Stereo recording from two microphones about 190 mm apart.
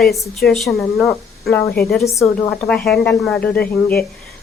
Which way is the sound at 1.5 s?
15° left (ahead or behind).